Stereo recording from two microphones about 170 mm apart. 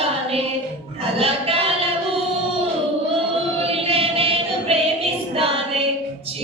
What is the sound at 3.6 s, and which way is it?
Choir, 35° right (ahead or behind).